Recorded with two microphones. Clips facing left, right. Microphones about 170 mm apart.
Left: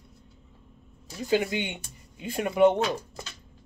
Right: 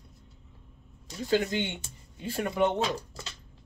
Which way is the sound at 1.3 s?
15° left (ahead or behind).